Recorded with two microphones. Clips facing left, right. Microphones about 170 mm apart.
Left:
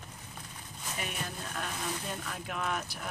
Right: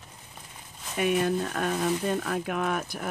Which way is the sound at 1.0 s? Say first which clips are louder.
Right 17 dB; 60° right (ahead or behind).